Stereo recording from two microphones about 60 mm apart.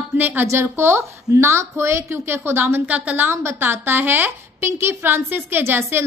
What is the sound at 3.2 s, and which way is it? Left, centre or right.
A woman's voice, right.